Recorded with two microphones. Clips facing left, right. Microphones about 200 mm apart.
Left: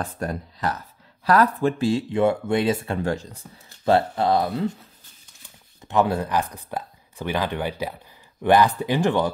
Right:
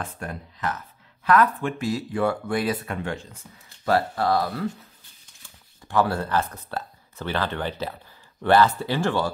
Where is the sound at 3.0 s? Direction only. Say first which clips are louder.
Left 5 dB; 40° left (ahead or behind).